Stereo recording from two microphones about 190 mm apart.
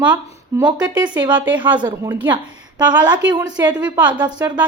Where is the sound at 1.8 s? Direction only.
25° right (ahead or behind).